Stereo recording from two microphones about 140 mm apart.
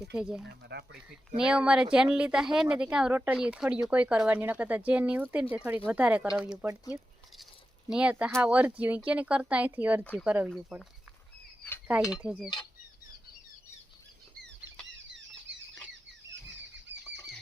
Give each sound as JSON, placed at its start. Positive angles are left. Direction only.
{"t": 0.0, "sound": "speech", "side_deg": -5}
{"t": 10.0, "sound": "speech", "side_deg": 10}
{"t": 10.2, "sound": "speech", "side_deg": -10}
{"t": 11.9, "sound": "speech", "side_deg": -5}